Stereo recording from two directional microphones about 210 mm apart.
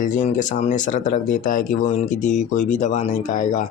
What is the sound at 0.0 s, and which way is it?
Speech, 35° left (ahead or behind).